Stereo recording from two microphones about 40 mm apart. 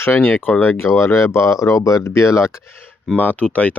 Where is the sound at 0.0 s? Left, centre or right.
Left.